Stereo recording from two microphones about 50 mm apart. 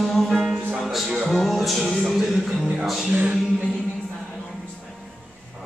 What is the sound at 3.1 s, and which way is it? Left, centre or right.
Music, right.